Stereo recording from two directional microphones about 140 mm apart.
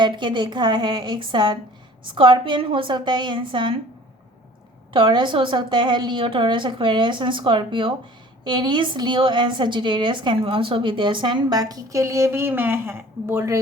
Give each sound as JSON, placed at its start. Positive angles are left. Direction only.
{"t": 0.0, "sound": "a woman's voice", "side_deg": -35}
{"t": 4.9, "sound": "a woman's voice", "side_deg": -35}